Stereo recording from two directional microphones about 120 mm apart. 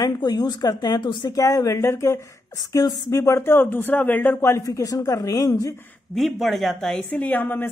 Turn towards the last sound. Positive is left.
turn(degrees=15)  # may be behind; listen again after turning